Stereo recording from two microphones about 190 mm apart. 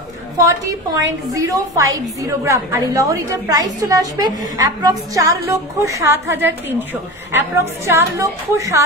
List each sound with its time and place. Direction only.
0.4 s a woman's voice: 15° right (ahead or behind)